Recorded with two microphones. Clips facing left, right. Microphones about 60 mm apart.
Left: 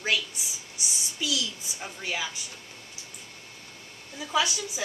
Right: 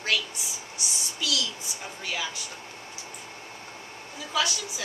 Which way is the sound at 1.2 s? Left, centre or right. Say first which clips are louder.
Even; left.